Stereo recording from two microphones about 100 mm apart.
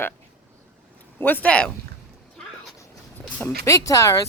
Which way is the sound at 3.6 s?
30° left (ahead or behind).